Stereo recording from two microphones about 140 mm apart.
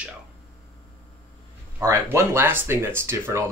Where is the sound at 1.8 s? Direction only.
20° right (ahead or behind).